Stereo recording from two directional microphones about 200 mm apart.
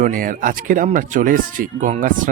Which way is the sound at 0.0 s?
40° right (ahead or behind).